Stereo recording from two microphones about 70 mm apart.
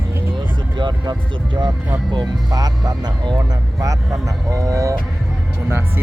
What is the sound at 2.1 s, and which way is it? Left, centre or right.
Speech, right.